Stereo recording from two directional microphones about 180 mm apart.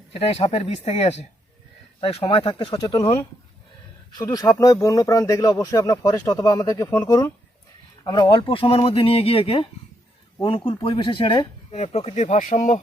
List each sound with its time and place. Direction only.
0.1 s speech: 35° left (ahead or behind)